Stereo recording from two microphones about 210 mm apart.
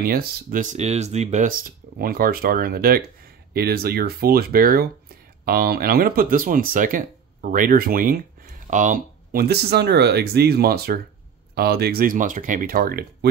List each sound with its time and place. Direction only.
0.0 s speech: 45° right (ahead or behind)